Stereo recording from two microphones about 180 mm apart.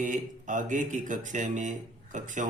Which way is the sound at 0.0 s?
45° right (ahead or behind).